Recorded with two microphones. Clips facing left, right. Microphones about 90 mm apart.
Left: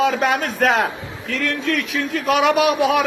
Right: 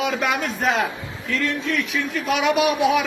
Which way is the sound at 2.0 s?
45° left (ahead or behind).